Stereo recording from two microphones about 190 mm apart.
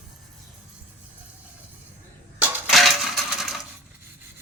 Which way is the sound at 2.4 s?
Centre (ahead or behind).